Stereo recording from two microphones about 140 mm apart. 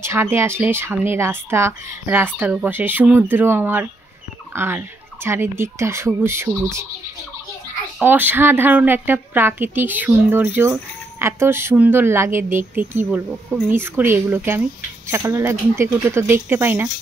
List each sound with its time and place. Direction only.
0.0 s a woman's voice: 20° right (ahead or behind)
8.0 s a woman's voice: 15° right (ahead or behind)